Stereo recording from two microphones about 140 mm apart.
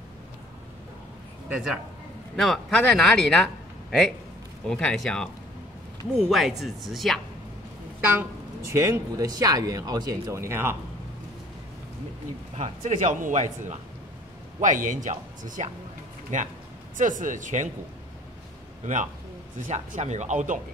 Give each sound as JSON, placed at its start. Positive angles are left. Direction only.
{"t": 1.5, "sound": "speech", "side_deg": -5}
{"t": 4.6, "sound": "a woman's voice", "side_deg": 5}
{"t": 8.7, "sound": "speech", "side_deg": -20}
{"t": 12.5, "sound": "a man's voice", "side_deg": -55}
{"t": 19.7, "sound": "a man's voice", "side_deg": -55}